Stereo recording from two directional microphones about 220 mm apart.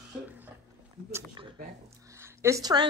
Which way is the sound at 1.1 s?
20° right (ahead or behind).